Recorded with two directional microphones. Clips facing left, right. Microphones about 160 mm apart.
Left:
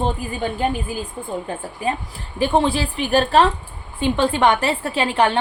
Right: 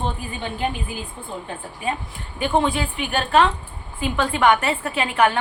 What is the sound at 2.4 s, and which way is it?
A woman's voice, 30° left (ahead or behind).